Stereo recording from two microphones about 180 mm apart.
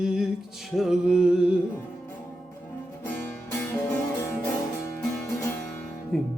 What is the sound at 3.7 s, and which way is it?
Music, 15° left (ahead or behind).